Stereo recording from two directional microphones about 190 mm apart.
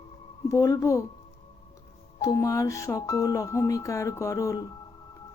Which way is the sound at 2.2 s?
15° left (ahead or behind).